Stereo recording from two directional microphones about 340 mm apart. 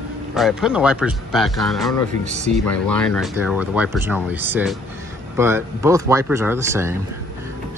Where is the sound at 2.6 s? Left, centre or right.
Centre.